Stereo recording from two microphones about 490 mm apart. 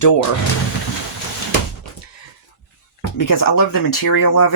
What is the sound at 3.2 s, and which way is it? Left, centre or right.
Speech, left.